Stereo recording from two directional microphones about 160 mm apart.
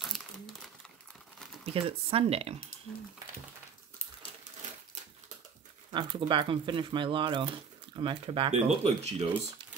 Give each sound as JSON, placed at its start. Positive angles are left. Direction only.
{"t": 0.0, "sound": "crumpling", "side_deg": 0}
{"t": 1.4, "sound": "a sound", "side_deg": 0}
{"t": 1.7, "sound": "speech", "side_deg": -35}
{"t": 5.9, "sound": "speech", "side_deg": -30}